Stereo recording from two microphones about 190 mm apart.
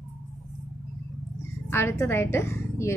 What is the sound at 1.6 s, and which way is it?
A woman's voice, 15° left (ahead or behind).